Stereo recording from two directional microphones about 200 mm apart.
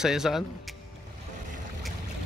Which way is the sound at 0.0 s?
Centre (ahead or behind).